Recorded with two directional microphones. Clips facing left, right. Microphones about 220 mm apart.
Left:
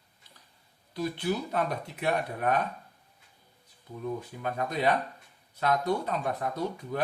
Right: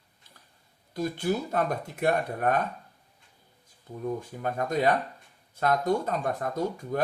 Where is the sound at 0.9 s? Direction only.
45° right (ahead or behind).